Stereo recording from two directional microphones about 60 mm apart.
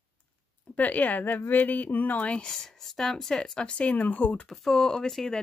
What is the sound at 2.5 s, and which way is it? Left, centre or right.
Speech, centre.